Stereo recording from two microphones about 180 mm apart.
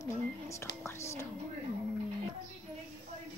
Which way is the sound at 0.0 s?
15° left (ahead or behind).